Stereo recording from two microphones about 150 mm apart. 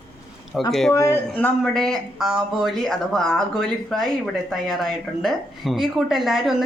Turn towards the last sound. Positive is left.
turn(degrees=0)  # may be behind; listen again after turning